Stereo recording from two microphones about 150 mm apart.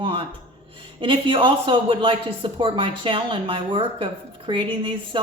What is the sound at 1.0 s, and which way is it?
Speech, 35° right (ahead or behind).